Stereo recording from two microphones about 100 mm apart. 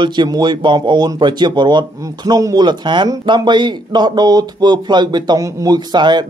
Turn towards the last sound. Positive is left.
turn(degrees=-45)  # may be behind; listen again after turning